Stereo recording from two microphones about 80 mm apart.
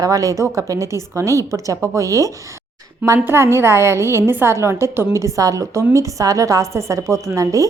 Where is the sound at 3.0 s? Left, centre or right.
Right.